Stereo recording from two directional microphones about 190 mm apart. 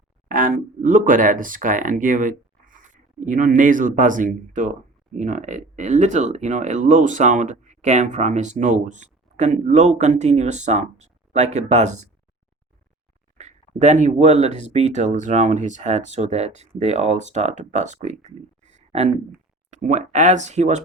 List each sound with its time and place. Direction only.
0.3 s speech: 45° right (ahead or behind)
13.4 s speech: 35° right (ahead or behind)